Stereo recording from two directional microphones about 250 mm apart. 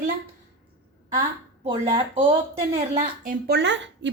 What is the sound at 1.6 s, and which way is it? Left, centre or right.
A woman's voice, centre.